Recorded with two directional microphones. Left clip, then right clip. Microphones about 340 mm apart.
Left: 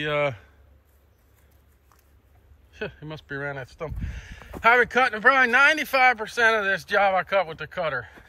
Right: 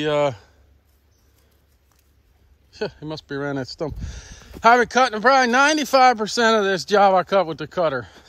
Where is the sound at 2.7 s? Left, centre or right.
Centre.